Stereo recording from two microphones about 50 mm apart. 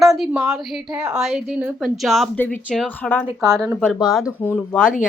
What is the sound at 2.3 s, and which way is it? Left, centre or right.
Speech, left.